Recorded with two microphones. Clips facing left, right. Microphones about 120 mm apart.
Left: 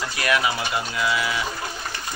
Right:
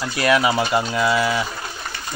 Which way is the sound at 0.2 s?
25° right (ahead or behind).